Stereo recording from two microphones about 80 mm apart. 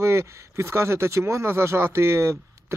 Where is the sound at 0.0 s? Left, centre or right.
Right.